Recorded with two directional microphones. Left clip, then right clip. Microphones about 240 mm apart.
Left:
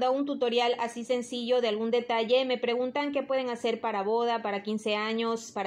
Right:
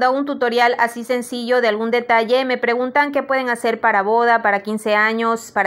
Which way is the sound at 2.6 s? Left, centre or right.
Centre.